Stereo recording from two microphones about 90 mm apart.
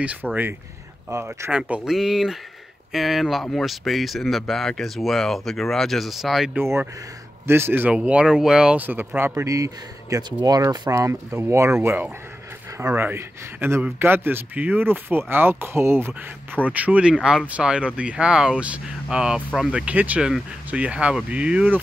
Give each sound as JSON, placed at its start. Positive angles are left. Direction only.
{"t": 0.0, "sound": "speech", "side_deg": -15}
{"t": 1.5, "sound": "speech", "side_deg": -10}
{"t": 6.5, "sound": "a man's voice", "side_deg": -25}
{"t": 7.9, "sound": "a man's voice", "side_deg": -10}
{"t": 11.0, "sound": "a man's voice", "side_deg": -30}
{"t": 17.1, "sound": "speech", "side_deg": -5}